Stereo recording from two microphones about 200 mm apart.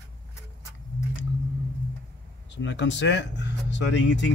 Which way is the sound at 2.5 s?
65° left (ahead or behind).